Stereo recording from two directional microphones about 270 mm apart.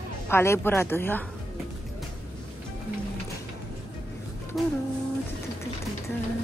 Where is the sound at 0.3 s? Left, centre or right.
Centre.